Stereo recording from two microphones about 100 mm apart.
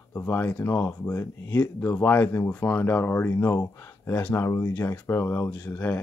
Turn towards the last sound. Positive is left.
turn(degrees=20)  # may be behind; listen again after turning